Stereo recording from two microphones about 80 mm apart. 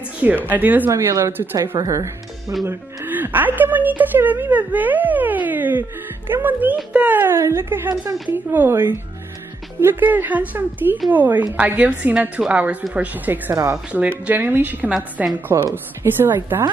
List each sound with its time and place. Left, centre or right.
0.5 s a woman's voice: right
0.8 s a woman's voice: right
1.3 s a woman's voice: right
1.6 s speech: right
3.1 s a woman's voice: right
7.3 s a woman's voice: right